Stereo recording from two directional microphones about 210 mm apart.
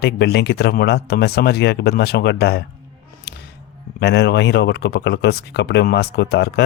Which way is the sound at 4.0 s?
55° left (ahead or behind).